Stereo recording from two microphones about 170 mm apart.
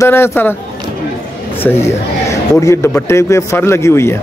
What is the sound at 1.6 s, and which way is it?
A man's voice, 15° left (ahead or behind).